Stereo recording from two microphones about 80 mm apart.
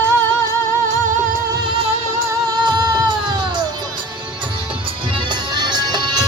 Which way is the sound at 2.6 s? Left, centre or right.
Right.